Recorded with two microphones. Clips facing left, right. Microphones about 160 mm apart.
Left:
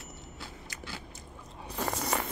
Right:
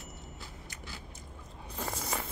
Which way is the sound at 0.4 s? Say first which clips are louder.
Left 3 dB; 90° left.